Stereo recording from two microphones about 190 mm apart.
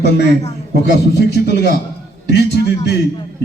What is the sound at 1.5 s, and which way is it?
A man's voice, 60° left (ahead or behind).